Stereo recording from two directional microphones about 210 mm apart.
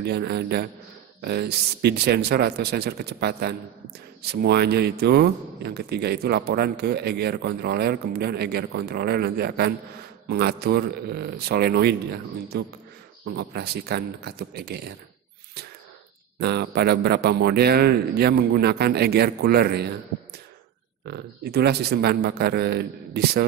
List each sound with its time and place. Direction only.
0.0 s a man's voice: 50° right (ahead or behind)
16.3 s a man's voice: 50° right (ahead or behind)
21.1 s a man's voice: 50° right (ahead or behind)